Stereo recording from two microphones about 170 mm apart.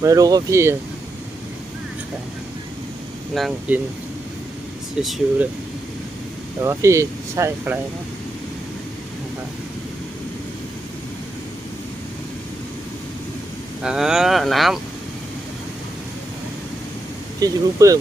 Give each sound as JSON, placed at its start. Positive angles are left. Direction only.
{"t": 0.0, "sound": "speech", "side_deg": -20}
{"t": 3.3, "sound": "speech", "side_deg": 0}
{"t": 4.9, "sound": "speech", "side_deg": -5}
{"t": 6.6, "sound": "speech", "side_deg": -15}
{"t": 13.8, "sound": "speech", "side_deg": -5}
{"t": 17.4, "sound": "speech", "side_deg": -20}